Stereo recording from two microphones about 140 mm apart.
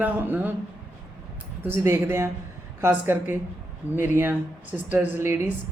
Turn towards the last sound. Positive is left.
turn(degrees=-10)  # may be behind; listen again after turning